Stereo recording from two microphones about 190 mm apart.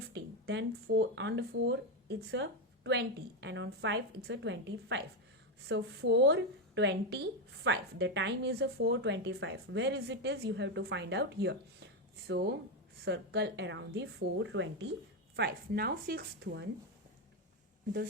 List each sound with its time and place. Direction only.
0.1 s a woman's voice: 65° right (ahead or behind)
15.4 s speech: 55° right (ahead or behind)